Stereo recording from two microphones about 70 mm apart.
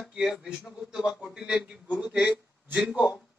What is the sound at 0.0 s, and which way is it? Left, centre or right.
A man's voice, centre.